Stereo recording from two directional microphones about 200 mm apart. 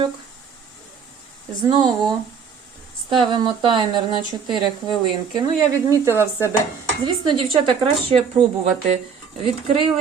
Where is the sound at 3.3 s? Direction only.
20° right (ahead or behind).